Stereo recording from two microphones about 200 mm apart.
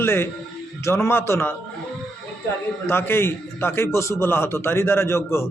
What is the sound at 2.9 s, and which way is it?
A man's voice, 10° left (ahead or behind).